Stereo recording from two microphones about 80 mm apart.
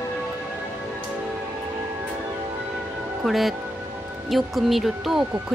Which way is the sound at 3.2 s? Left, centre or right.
Centre.